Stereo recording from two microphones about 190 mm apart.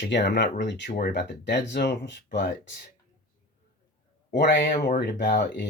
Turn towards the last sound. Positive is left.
turn(degrees=50)  # may be behind; listen again after turning